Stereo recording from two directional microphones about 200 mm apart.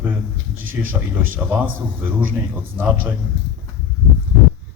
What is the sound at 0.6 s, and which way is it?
Speech, 90° right.